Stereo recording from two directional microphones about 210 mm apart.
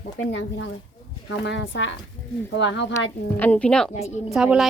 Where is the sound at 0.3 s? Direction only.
60° left (ahead or behind).